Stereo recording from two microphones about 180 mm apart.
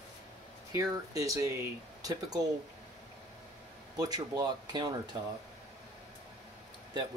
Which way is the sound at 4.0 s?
20° right (ahead or behind).